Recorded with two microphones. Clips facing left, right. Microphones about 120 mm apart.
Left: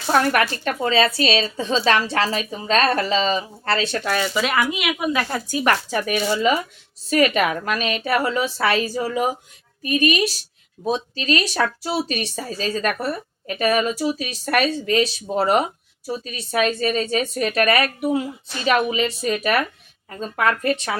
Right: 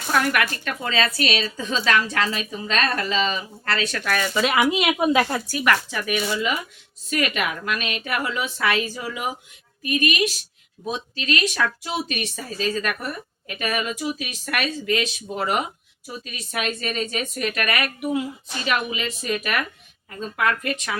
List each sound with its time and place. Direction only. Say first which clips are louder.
0.1 s speech: left 4 dB; 35° left (ahead or behind)
4.7 s a woman's voice: right 3 dB; 30° right (ahead or behind)
5.5 s speech: left 2 dB; 30° left (ahead or behind)